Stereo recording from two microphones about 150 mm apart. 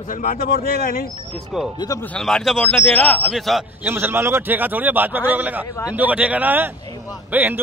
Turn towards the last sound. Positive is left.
turn(degrees=-10)  # may be behind; listen again after turning